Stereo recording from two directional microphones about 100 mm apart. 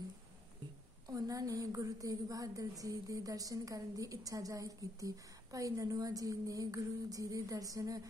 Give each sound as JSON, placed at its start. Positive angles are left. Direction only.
{"t": 1.0, "sound": "a woman's voice", "side_deg": -35}